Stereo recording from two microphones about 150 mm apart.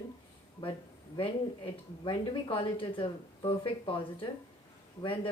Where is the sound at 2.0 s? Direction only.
35° left (ahead or behind).